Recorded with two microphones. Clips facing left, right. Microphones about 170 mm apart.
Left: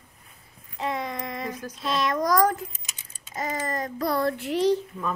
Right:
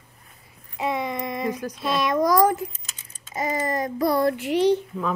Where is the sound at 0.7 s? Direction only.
15° right (ahead or behind).